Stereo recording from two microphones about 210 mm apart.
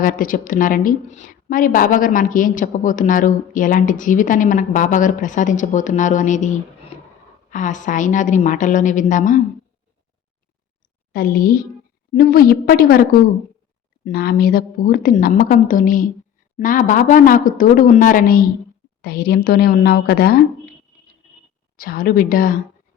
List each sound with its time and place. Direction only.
0.0 s a woman's voice: 40° left (ahead or behind)
6.9 s a sound: 35° left (ahead or behind)
7.5 s a woman's voice: 35° left (ahead or behind)
11.1 s a woman's voice: 45° left (ahead or behind)
21.8 s a woman's voice: 45° left (ahead or behind)